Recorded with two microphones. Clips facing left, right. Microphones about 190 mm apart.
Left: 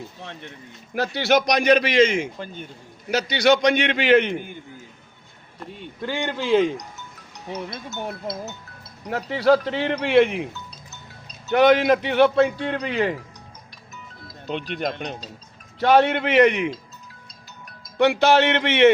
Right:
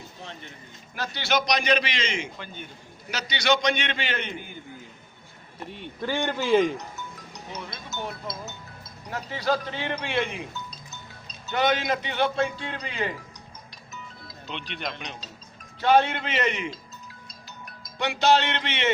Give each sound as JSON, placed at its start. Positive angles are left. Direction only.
{"t": 0.9, "sound": "a man's voice", "side_deg": 60}
{"t": 6.3, "sound": "a man's voice", "side_deg": -10}
{"t": 7.5, "sound": "a man's voice", "side_deg": 55}
{"t": 14.4, "sound": "speech", "side_deg": 45}
{"t": 15.8, "sound": "a man's voice", "side_deg": 65}
{"t": 17.9, "sound": "a man's voice", "side_deg": 60}